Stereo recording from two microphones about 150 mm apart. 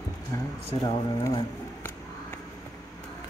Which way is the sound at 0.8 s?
30° left (ahead or behind).